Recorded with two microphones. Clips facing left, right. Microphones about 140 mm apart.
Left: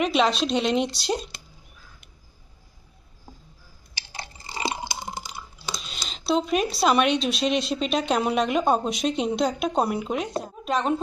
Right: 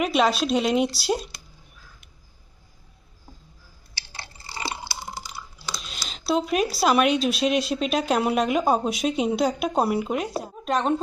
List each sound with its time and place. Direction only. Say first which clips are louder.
0.0 s speech: even; 5° right (ahead or behind)
3.9 s chewing: left 3 dB; 20° left (ahead or behind)
5.7 s speech: even; centre (ahead or behind)